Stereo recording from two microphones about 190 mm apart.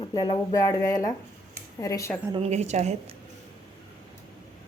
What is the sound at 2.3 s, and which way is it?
Speech, 35° right (ahead or behind).